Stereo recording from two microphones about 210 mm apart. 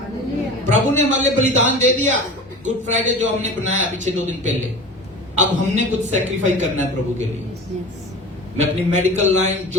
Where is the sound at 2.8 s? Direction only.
35° right (ahead or behind).